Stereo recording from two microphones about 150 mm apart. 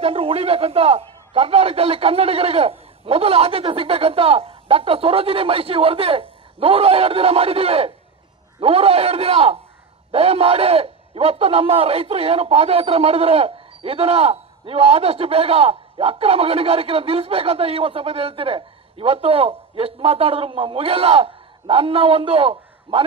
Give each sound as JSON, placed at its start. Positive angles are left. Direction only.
{"t": 0.0, "sound": "a man's voice", "side_deg": -40}